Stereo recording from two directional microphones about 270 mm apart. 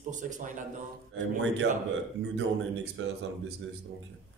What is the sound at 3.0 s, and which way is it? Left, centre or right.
Speech, right.